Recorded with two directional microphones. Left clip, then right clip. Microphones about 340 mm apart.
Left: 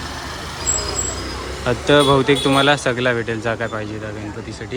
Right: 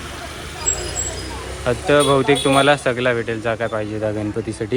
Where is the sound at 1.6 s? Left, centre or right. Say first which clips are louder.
Left 1 dB; centre.